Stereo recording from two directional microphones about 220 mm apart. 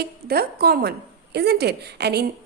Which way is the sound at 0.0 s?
45° right (ahead or behind).